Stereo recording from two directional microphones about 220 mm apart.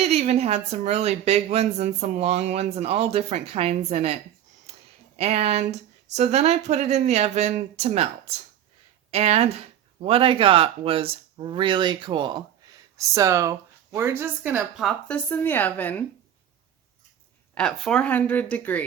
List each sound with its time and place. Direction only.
0.1 s a woman's voice: 30° right (ahead or behind)
12.6 s a sound: 15° right (ahead or behind)
13.0 s speech: 15° right (ahead or behind); by 16.0 s 10° left (ahead or behind)
17.5 s speech: 5° left (ahead or behind)